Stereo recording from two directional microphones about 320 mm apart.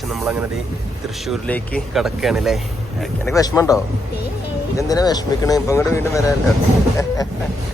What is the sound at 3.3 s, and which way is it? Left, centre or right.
Speech, centre.